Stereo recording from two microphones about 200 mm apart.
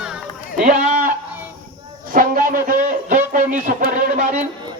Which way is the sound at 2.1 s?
45° right (ahead or behind).